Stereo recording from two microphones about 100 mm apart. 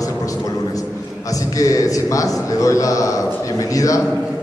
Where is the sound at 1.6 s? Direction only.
35° left (ahead or behind).